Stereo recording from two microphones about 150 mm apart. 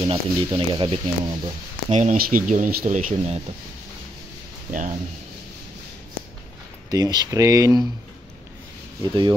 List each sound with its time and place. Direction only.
0.0 s speech: 35° right (ahead or behind)
1.9 s speech: 50° right (ahead or behind)
2.1 s speech: 70° right (ahead or behind)
4.6 s speech: 60° right (ahead or behind)
6.9 s speech: 25° right (ahead or behind)
9.0 s speech: 30° right (ahead or behind)